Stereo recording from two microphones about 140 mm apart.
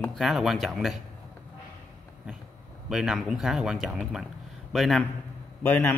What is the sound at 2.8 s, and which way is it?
A man's voice, 5° right (ahead or behind).